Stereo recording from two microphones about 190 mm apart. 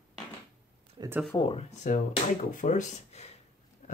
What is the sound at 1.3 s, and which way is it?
Speech, 25° left (ahead or behind).